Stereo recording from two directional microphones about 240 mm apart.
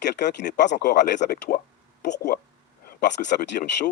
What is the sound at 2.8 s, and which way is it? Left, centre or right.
Speech, left.